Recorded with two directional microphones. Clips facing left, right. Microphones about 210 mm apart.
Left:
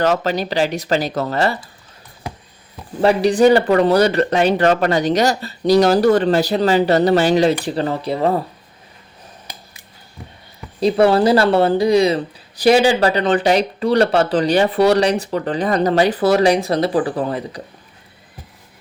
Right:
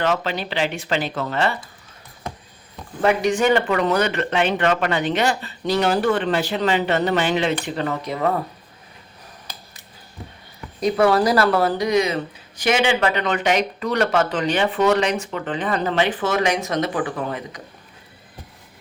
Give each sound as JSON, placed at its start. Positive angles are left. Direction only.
{"t": 0.0, "sound": "speech", "side_deg": 40}
{"t": 3.0, "sound": "speech", "side_deg": 35}
{"t": 10.8, "sound": "speech", "side_deg": 30}